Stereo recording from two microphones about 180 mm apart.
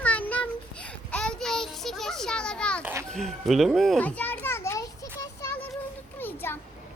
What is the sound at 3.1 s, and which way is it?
Children playing, centre (ahead or behind).